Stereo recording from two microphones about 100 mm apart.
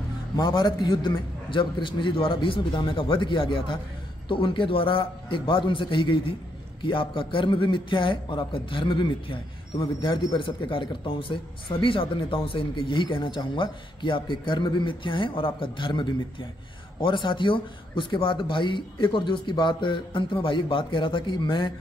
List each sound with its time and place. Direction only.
0.4 s a man's voice: 50° left (ahead or behind)